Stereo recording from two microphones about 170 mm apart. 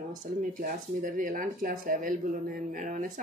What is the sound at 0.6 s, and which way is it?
Speech, 50° right (ahead or behind).